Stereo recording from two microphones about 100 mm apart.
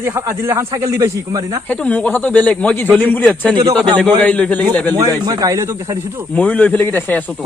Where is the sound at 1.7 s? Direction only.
15° left (ahead or behind).